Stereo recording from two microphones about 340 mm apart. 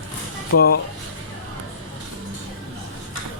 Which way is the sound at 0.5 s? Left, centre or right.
Left.